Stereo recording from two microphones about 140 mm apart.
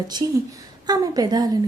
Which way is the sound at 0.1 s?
30° right (ahead or behind).